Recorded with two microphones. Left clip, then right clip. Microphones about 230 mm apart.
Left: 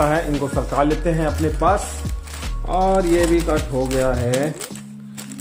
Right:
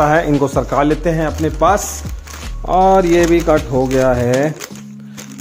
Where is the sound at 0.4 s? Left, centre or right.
Right.